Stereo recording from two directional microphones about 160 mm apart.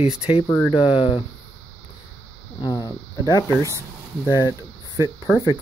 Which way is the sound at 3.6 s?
20° right (ahead or behind).